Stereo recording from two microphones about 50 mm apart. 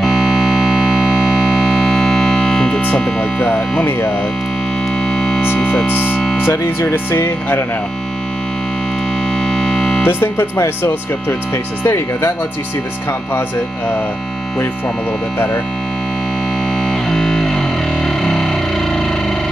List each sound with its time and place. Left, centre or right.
0.0 s music: centre
1.8 s music: centre
5.1 s music: centre
5.4 s music: left
6.4 s speech: left
9.4 s music: centre
10.0 s speech: left
17.1 s music: centre
18.0 s a sound: centre